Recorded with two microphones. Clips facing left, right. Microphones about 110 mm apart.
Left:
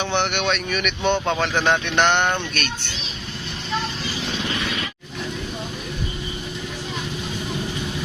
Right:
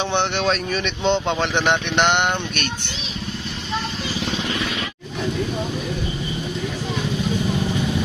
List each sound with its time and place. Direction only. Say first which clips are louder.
0.0 s speech: right 2 dB; 25° right (ahead or behind)